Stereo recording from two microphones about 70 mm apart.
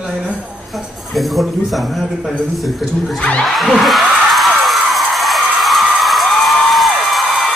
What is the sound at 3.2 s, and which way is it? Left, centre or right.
Music, centre.